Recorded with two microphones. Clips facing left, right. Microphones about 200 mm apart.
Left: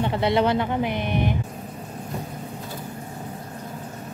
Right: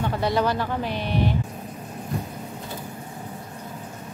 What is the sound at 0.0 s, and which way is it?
Speech, 25° left (ahead or behind).